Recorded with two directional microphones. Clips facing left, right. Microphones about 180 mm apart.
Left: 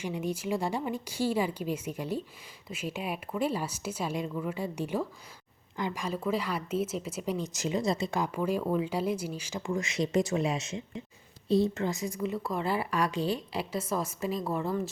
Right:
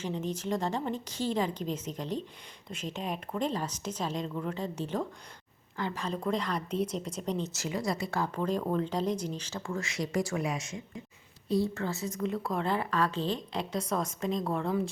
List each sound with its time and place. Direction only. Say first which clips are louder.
0.0 s a woman's voice: left 1 dB; 10° left (ahead or behind)